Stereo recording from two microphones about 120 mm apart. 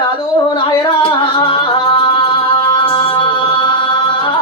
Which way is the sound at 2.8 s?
50° left (ahead or behind).